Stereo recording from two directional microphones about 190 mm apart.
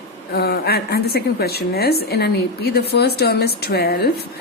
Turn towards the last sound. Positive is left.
turn(degrees=55)  # may be behind; listen again after turning